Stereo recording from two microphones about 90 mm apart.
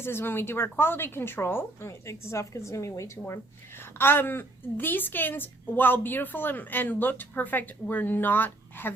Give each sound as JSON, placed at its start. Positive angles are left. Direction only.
{"t": 0.0, "sound": "a woman's voice", "side_deg": 25}